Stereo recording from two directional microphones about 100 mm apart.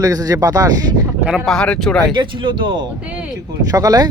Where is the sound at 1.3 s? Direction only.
5° left (ahead or behind).